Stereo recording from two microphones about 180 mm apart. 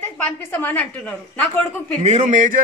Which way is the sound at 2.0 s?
40° right (ahead or behind).